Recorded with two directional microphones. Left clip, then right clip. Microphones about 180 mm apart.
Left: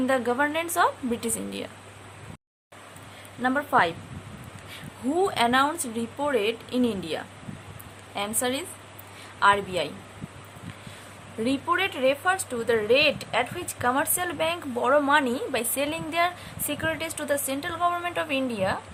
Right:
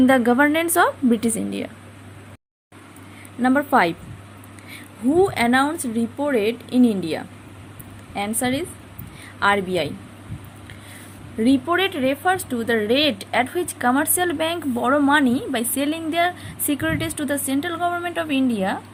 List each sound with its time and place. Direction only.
0.0 s a woman's voice: 30° right (ahead or behind)
3.4 s a woman's voice: 25° right (ahead or behind)
5.1 s speech: 10° right (ahead or behind)
11.4 s speech: 15° right (ahead or behind)